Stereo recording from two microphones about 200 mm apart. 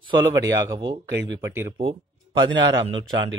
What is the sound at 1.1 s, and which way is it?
Speech, 60° right (ahead or behind).